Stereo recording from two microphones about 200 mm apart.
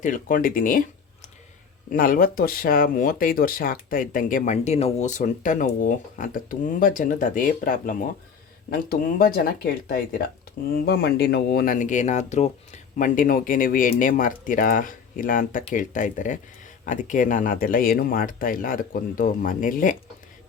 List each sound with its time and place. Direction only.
0.0 s speech: 40° left (ahead or behind)
1.9 s speech: 45° left (ahead or behind)